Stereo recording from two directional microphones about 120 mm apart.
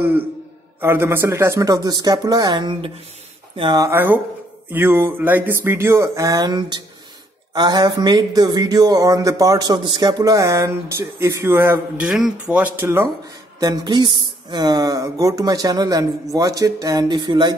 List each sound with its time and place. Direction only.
0.7 s speech: 20° right (ahead or behind); by 2.9 s 40° right (ahead or behind)
3.7 s speech: 30° right (ahead or behind)
13.2 s a sound: 35° right (ahead or behind)